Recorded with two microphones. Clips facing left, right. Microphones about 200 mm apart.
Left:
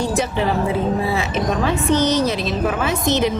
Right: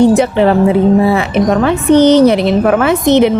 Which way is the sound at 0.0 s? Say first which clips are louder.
Right 12 dB; 60° right (ahead or behind).